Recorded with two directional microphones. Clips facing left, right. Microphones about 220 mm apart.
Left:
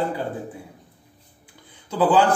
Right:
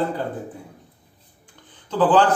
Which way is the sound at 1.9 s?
10° left (ahead or behind).